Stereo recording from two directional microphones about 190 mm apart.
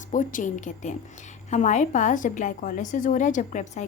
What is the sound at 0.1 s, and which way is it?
A woman's voice, 45° left (ahead or behind).